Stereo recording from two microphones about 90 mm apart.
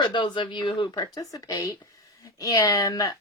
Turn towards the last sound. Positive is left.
turn(degrees=45)  # may be behind; listen again after turning